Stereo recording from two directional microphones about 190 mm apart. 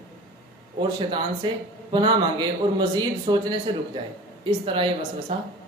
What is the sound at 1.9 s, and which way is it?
Speech, 25° right (ahead or behind).